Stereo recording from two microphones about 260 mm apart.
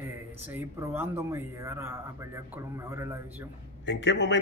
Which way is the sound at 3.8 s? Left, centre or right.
Left.